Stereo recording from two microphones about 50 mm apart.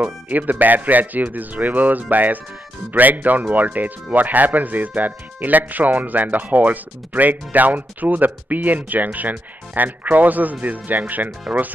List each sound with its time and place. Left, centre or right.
0.3 s speech: right